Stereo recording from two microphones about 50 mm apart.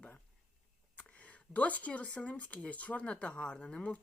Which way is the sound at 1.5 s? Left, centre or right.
Left.